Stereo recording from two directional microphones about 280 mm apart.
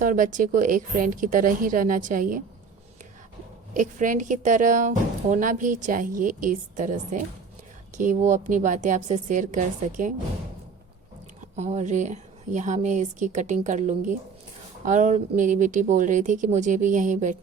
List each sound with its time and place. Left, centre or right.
0.0 s a woman's voice: right
3.8 s a woman's voice: right
11.5 s a woman's voice: right